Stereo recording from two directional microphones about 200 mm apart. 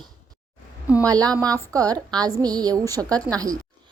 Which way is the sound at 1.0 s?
20° right (ahead or behind).